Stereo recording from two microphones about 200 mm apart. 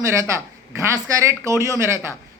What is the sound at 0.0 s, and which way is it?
A man's voice, 15° right (ahead or behind).